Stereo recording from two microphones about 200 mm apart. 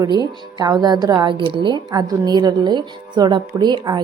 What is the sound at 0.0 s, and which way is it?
Speech, 20° right (ahead or behind).